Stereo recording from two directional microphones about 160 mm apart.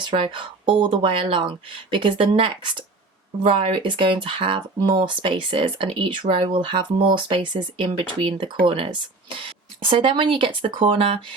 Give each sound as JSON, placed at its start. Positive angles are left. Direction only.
{"t": 0.1, "sound": "speech", "side_deg": -30}